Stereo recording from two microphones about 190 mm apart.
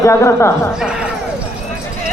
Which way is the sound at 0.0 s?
15° left (ahead or behind).